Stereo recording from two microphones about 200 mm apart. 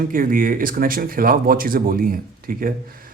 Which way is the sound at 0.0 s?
45° right (ahead or behind).